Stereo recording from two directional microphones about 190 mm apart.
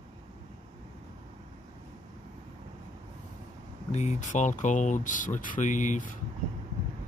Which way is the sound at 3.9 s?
40° left (ahead or behind).